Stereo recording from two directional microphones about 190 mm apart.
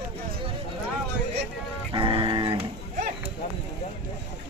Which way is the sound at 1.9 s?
25° right (ahead or behind).